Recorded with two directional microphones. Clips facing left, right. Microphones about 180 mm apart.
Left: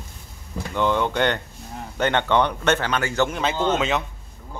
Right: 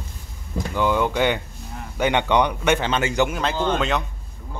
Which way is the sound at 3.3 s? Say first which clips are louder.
Even; centre (ahead or behind).